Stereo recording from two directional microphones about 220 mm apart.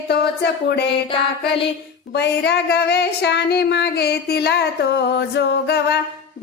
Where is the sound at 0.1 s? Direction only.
50° left (ahead or behind).